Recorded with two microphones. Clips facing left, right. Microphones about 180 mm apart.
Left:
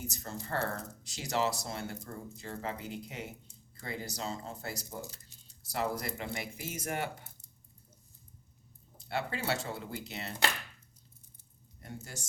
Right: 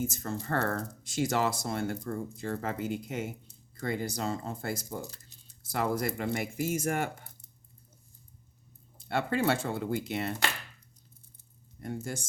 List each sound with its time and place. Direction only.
0.2 s speech: 60° right (ahead or behind)
9.0 s speech: 55° right (ahead or behind)
11.8 s speech: 55° right (ahead or behind)